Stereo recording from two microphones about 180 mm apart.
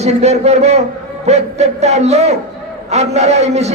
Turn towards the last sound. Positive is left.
turn(degrees=-35)  # may be behind; listen again after turning